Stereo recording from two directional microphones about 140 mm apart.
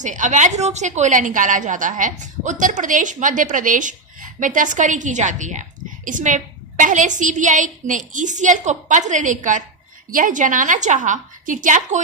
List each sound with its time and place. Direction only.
0.0 s a woman's voice: 60° right (ahead or behind)